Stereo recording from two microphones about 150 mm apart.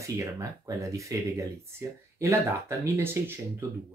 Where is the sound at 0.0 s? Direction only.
20° right (ahead or behind).